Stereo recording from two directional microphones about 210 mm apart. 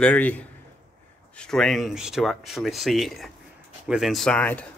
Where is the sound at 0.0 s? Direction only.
5° left (ahead or behind).